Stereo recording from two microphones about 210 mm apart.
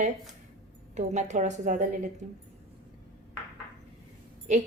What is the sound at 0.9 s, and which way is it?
Speech, 35° right (ahead or behind).